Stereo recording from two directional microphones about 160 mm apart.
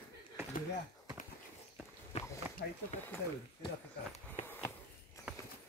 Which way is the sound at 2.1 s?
40° left (ahead or behind).